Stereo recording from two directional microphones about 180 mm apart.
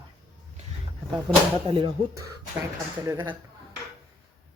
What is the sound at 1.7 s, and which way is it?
Speech, 25° right (ahead or behind).